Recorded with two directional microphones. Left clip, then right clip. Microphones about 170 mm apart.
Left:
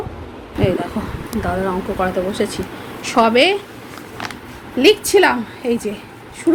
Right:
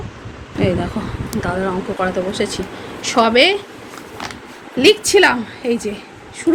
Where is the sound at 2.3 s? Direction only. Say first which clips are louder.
Even; 10° left (ahead or behind).